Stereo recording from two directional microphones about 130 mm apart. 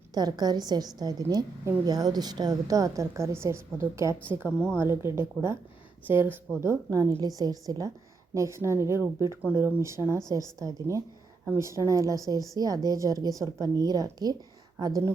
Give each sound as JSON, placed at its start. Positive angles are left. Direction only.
{"t": 0.1, "sound": "a woman's voice", "side_deg": -30}